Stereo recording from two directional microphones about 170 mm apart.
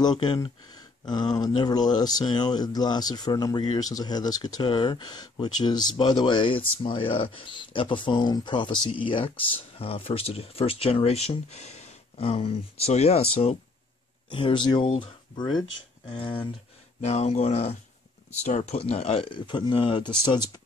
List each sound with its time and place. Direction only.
0.0 s speech: 25° left (ahead or behind)